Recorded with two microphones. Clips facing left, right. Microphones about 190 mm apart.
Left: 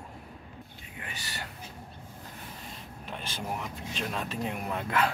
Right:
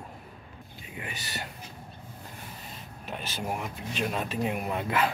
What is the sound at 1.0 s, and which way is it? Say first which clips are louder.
Speech: right 3 dB; 15° right (ahead or behind).